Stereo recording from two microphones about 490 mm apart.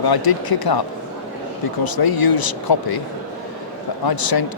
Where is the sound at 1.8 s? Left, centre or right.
Left.